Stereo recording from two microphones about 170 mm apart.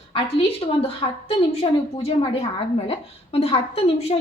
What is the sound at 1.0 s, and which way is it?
A woman's voice, 30° left (ahead or behind).